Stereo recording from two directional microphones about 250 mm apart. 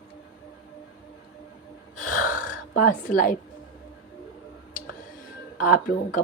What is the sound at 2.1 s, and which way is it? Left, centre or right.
Gasp, left.